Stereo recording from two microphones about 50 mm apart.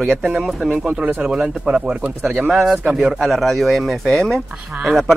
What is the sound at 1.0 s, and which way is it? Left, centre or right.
Speech, right.